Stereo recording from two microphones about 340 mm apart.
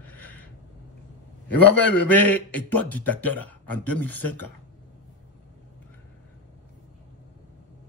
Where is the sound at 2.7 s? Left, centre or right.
Centre.